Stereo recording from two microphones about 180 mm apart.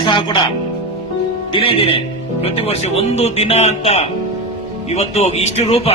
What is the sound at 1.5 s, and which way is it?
Speech, 30° left (ahead or behind).